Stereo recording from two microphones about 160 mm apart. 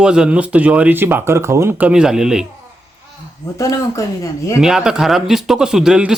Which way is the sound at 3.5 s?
20° left (ahead or behind).